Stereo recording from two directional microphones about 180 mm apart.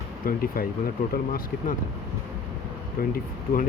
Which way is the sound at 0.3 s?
55° left (ahead or behind).